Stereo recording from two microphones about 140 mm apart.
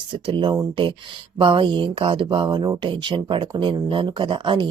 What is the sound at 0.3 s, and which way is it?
Speech, 35° right (ahead or behind).